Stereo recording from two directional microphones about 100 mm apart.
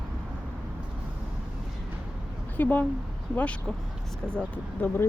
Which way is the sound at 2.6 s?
15° left (ahead or behind).